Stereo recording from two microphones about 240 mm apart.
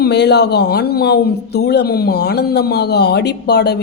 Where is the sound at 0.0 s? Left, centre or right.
Left.